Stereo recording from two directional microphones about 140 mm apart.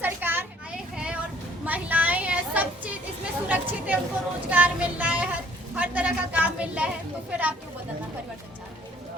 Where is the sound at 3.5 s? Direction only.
10° right (ahead or behind).